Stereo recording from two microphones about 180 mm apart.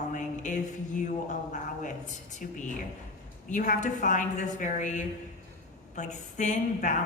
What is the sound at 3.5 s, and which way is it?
A woman's voice, 45° left (ahead or behind).